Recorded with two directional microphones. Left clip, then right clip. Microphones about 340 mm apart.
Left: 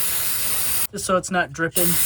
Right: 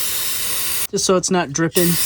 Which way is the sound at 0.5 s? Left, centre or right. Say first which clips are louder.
Right 5 dB; centre.